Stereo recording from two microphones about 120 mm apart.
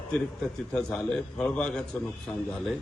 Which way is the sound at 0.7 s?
5° left (ahead or behind).